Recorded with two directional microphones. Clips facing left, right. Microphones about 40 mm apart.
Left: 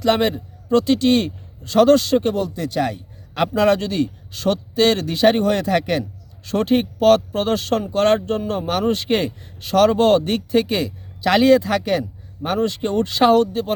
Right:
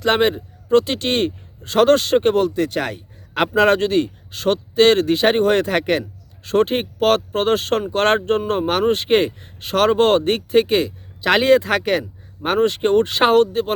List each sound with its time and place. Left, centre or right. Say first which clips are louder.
0.0 s a man's voice: right 1 dB; right